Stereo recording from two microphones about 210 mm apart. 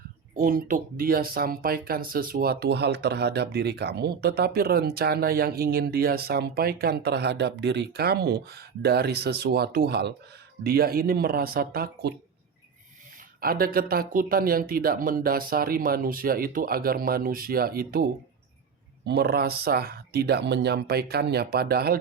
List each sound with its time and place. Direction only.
0.3 s speech: 40° right (ahead or behind)
13.4 s speech: 45° right (ahead or behind)